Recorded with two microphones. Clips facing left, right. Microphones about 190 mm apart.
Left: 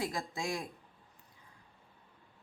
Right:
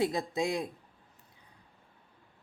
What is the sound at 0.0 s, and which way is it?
Speech, 20° right (ahead or behind).